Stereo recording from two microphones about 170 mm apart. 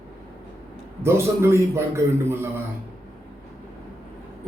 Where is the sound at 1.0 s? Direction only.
15° right (ahead or behind).